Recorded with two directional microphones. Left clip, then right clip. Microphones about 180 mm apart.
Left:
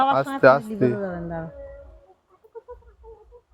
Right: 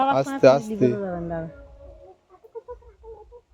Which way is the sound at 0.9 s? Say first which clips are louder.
Right 1 dB; 60° left (ahead or behind).